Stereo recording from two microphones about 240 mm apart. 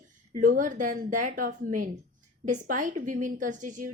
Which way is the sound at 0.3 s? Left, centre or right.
Right.